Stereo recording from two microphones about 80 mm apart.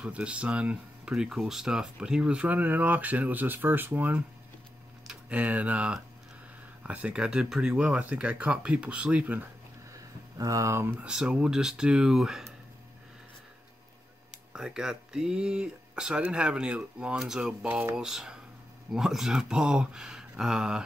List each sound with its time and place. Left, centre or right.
0.0 s speech: centre
10.3 s speech: right
11.1 s speech: centre
14.5 s speech: centre